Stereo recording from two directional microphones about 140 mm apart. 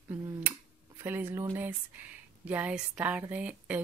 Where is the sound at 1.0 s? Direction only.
15° right (ahead or behind).